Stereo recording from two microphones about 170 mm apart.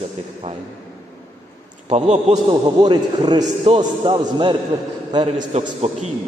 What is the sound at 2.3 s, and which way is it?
A man's voice, 25° right (ahead or behind).